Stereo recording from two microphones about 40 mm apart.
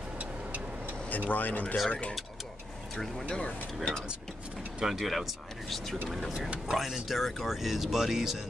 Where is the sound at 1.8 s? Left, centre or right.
Left.